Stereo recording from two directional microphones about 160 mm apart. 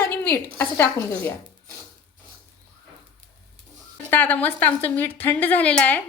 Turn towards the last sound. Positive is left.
turn(degrees=10)  # may be behind; listen again after turning